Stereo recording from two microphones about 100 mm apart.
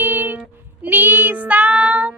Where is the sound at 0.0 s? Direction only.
20° right (ahead or behind).